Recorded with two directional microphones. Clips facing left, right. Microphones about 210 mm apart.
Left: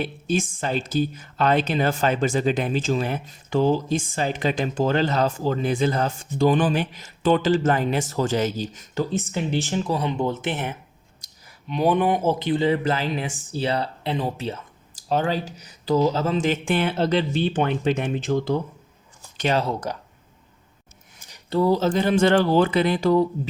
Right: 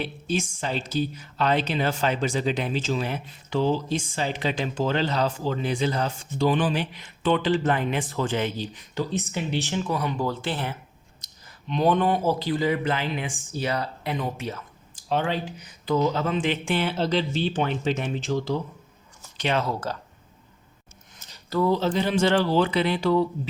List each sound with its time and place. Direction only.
0.0 s speech: 50° left (ahead or behind)
10.0 s speech: 25° left (ahead or behind)
11.2 s a sound: 10° left (ahead or behind)
11.7 s speech: 10° left (ahead or behind)
12.8 s speech: 40° left (ahead or behind)
15.1 s speech: 40° left (ahead or behind)
19.4 s speech: 40° left (ahead or behind)
19.9 s speech: 15° left (ahead or behind)
21.2 s a sound: 15° left (ahead or behind)
21.5 s speech: 35° left (ahead or behind)